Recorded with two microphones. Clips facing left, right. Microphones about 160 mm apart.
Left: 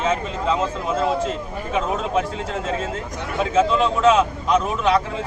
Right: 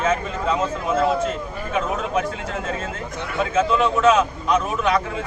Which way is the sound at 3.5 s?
30° left (ahead or behind).